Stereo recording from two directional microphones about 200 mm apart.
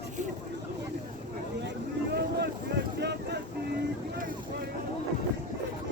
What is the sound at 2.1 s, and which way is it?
Boat, 55° right (ahead or behind).